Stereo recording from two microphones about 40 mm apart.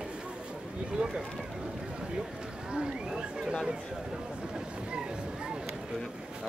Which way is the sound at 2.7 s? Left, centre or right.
Right.